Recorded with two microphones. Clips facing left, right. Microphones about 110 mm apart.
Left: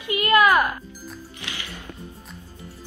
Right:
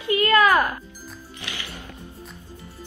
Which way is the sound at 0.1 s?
20° left (ahead or behind).